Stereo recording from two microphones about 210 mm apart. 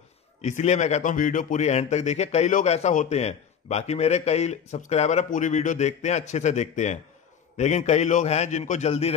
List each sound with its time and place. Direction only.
0.4 s speech: 35° left (ahead or behind)